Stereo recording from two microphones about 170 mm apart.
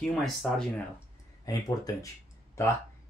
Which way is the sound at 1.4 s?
20° left (ahead or behind).